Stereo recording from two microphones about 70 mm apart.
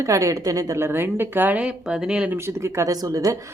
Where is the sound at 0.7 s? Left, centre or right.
Right.